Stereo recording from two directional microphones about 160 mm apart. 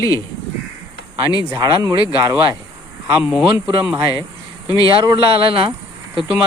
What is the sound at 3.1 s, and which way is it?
Speech, 15° right (ahead or behind).